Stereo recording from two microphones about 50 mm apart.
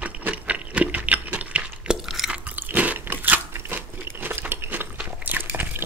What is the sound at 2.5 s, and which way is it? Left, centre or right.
Chewing, right.